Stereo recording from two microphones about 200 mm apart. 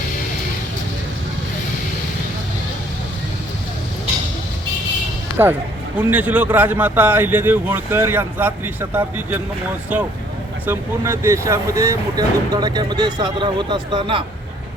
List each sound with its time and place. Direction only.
6.0 s speech: 10° right (ahead or behind); by 14.3 s 25° right (ahead or behind)